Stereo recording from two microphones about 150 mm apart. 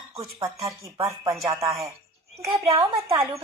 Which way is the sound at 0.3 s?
20° right (ahead or behind).